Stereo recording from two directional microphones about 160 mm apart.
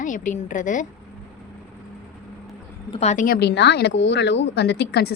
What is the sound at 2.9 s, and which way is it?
Speech, 45° left (ahead or behind).